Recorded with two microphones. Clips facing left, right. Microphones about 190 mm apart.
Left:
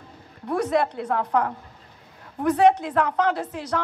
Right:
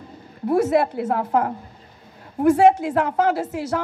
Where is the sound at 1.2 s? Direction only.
25° right (ahead or behind).